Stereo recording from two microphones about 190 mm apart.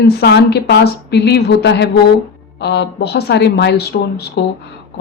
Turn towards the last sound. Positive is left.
turn(degrees=60)  # may be behind; listen again after turning